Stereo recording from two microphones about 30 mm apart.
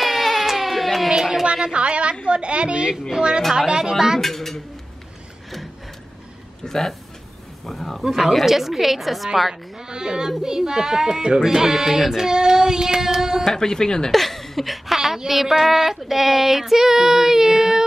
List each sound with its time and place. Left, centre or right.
0.0 s baby cry: centre
1.1 s speech: centre
1.4 s a woman's voice: right
3.1 s child singing: right
3.5 s speech: centre
4.2 s speech: centre
6.6 s speech: centre
8.1 s a woman's voice: centre
9.5 s child singing: right
11.4 s speech: centre
12.3 s child singing: centre
13.6 s speech: left
14.1 s a woman's voice: centre
15.0 s speech: centre